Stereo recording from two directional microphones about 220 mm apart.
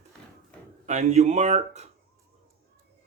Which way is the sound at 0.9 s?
30° right (ahead or behind).